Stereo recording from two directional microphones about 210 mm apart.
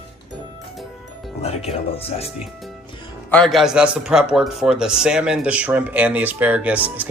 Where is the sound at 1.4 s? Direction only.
30° left (ahead or behind).